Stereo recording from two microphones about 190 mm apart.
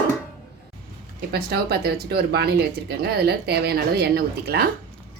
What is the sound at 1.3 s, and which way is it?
Speech, 60° right (ahead or behind).